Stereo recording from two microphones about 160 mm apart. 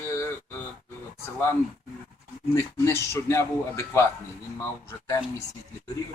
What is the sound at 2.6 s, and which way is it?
Speech, 15° left (ahead or behind).